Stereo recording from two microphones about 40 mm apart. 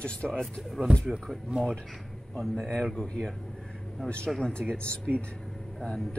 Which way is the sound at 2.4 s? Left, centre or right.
Centre.